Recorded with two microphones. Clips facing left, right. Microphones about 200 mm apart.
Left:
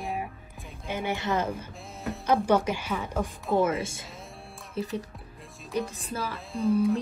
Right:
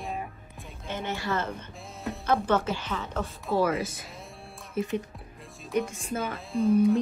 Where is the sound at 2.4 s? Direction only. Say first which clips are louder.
Left 2 dB; 15° left (ahead or behind).